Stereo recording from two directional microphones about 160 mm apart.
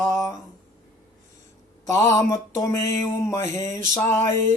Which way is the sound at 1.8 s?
20° left (ahead or behind).